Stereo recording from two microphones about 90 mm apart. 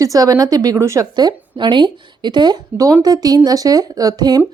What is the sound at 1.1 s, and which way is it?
A woman's voice, 55° right (ahead or behind).